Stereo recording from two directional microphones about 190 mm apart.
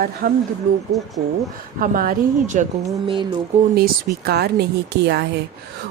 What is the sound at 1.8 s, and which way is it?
Speech, 45° right (ahead or behind).